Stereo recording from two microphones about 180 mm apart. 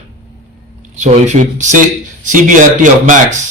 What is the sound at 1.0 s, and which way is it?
Speech, 40° right (ahead or behind).